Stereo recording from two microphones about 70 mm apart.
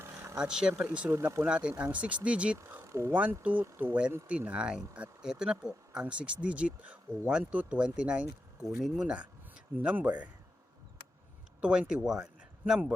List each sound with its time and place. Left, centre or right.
0.0 s a sound: right
0.3 s speech: centre
1.1 s speech: right
1.5 s speech: centre
2.8 s a sound: right
3.1 s speech: right
4.3 s speech: centre
8.6 s speech: centre
9.7 s speech: right
11.6 s speech: centre